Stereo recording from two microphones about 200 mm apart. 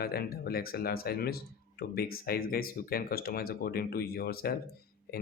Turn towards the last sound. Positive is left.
turn(degrees=50)  # may be behind; listen again after turning